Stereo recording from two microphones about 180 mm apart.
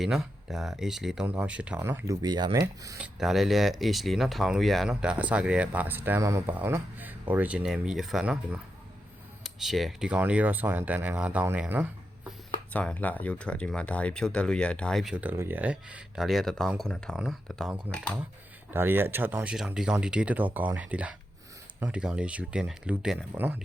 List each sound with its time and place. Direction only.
0.0 s speech: centre (ahead or behind)
2.2 s speech: 25° right (ahead or behind)
3.0 s speech: centre (ahead or behind)
9.4 s speech: centre (ahead or behind)
12.7 s speech: 10° left (ahead or behind); by 23.6 s 10° right (ahead or behind)